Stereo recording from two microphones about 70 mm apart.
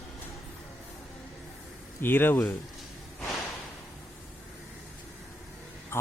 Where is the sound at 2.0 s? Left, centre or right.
Left.